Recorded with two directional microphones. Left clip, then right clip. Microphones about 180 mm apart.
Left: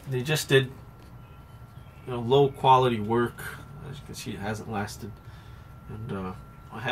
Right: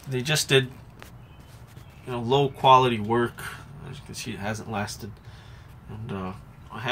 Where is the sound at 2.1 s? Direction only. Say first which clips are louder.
Left 1 dB; 5° right (ahead or behind).